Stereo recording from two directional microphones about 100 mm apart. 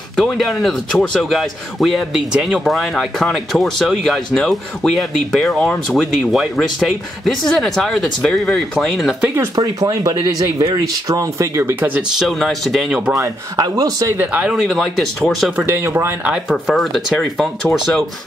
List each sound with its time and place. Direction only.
0.1 s speech: centre (ahead or behind)
9.2 s speech: 25° right (ahead or behind)
12.2 s speech: centre (ahead or behind)
13.1 s speech: 35° right (ahead or behind)
14.1 s speech: 15° right (ahead or behind); by 15.5 s 5° left (ahead or behind)
15.5 s speech: 25° right (ahead or behind)
16.3 s speech: 5° right (ahead or behind)